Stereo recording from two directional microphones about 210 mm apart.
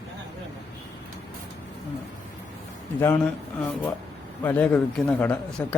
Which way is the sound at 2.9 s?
10° left (ahead or behind).